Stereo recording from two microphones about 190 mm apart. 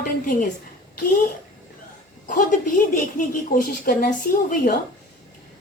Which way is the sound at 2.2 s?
45° left (ahead or behind).